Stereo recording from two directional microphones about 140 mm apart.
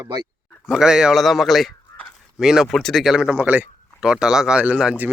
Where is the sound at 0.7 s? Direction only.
5° right (ahead or behind).